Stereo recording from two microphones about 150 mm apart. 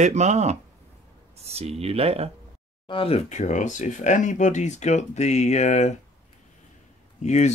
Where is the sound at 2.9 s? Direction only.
40° left (ahead or behind).